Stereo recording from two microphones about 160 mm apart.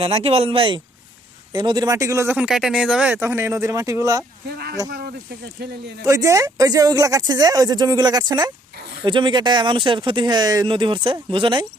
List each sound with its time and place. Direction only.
0.0 s speech: 40° right (ahead or behind); by 4.2 s 20° right (ahead or behind)
4.4 s speech: 80° right
4.9 s speech: 70° right (ahead or behind)
5.6 s speech: 80° right
6.0 s speech: 20° right (ahead or behind)